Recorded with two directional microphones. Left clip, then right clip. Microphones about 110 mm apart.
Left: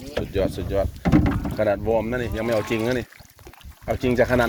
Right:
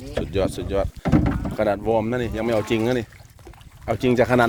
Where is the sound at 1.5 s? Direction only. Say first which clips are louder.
Right 1 dB; 50° right (ahead or behind).